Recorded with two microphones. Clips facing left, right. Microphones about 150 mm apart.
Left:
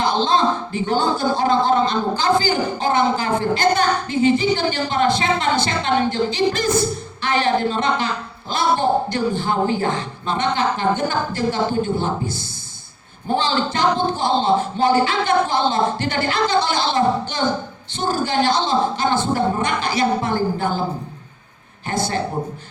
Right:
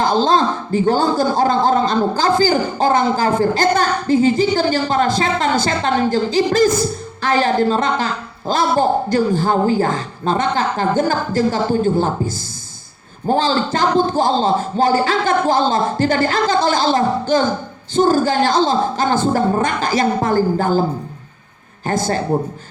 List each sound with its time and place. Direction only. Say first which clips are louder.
0.0 s a man's voice: right 3 dB; 40° right (ahead or behind)
21.8 s speech: right 4 dB; 45° right (ahead or behind)